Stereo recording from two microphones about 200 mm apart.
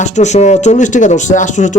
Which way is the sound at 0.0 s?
35° left (ahead or behind).